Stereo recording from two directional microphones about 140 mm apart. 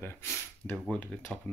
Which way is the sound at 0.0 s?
15° left (ahead or behind).